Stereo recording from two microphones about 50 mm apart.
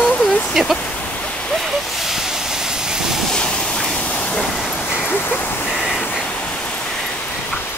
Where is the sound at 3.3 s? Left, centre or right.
Centre.